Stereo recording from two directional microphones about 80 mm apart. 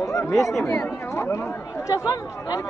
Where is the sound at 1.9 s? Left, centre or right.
Left.